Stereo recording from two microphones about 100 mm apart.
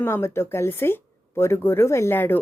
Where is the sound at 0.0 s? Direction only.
25° left (ahead or behind).